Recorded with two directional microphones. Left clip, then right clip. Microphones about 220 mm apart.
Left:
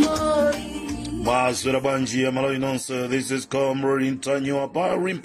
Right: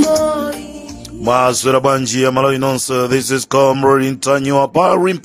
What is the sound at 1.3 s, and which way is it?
Speech, 45° right (ahead or behind).